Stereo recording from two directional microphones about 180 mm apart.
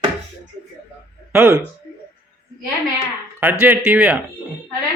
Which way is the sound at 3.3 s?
10° right (ahead or behind).